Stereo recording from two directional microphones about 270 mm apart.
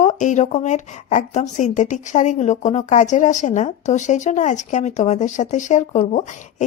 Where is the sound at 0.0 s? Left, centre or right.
Left.